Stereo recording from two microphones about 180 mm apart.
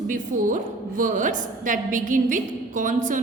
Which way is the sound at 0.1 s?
45° right (ahead or behind).